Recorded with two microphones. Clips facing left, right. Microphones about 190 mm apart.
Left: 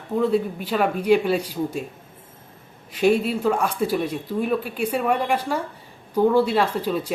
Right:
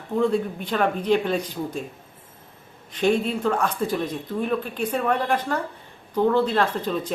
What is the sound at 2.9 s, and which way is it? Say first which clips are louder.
Speech: left 2 dB; 5° left (ahead or behind).